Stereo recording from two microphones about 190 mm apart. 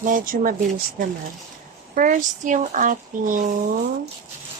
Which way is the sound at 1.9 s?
45° right (ahead or behind).